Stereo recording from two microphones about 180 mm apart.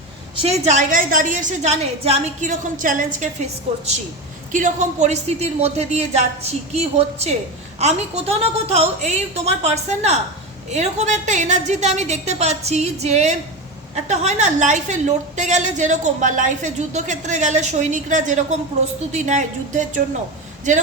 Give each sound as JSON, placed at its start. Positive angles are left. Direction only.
{"t": 0.4, "sound": "a woman's voice", "side_deg": -40}